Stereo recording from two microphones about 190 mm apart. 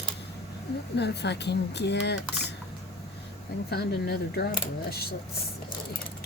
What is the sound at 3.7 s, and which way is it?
Speech, 55° left (ahead or behind).